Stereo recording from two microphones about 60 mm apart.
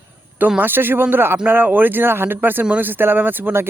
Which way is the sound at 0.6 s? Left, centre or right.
Right.